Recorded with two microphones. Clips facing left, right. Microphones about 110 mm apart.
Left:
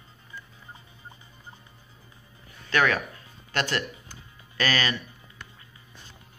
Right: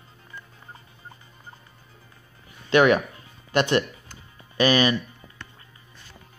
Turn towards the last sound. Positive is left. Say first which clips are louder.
# right 7 dB
turn(degrees=-20)  # may be behind; listen again after turning